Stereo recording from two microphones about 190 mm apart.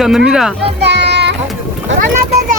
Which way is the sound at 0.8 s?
65° right (ahead or behind).